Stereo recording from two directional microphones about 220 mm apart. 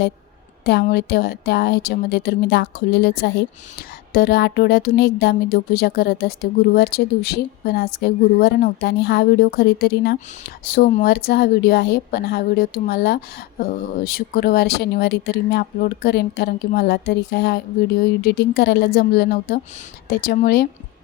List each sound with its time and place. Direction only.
0.6 s speech: 50° left (ahead or behind)